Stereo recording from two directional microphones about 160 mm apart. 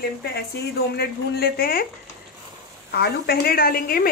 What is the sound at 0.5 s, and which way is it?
Speech, 90° left.